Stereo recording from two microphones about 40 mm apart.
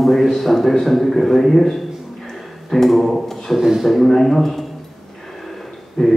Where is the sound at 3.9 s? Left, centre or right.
Centre.